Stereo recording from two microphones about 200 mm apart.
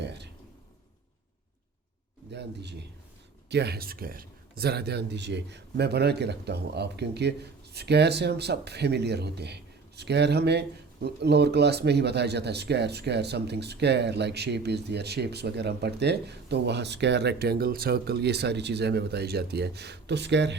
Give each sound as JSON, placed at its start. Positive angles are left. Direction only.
{"t": 2.3, "sound": "speech", "side_deg": -60}